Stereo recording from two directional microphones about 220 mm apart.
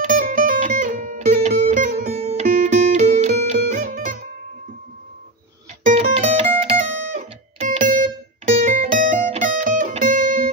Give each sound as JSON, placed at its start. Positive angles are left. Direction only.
{"t": 0.0, "sound": "music", "side_deg": -40}
{"t": 5.9, "sound": "music", "side_deg": -30}